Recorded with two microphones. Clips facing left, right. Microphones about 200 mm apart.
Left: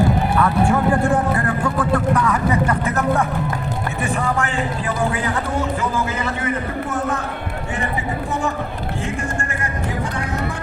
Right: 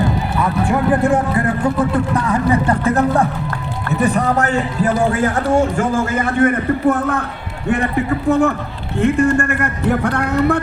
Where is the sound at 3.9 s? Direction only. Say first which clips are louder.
Right 8 dB; 35° right (ahead or behind).